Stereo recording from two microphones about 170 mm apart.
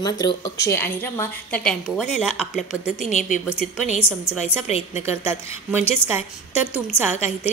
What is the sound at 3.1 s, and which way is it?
Speech, 50° left (ahead or behind).